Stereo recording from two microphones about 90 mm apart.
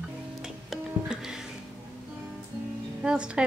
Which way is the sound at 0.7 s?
5° right (ahead or behind).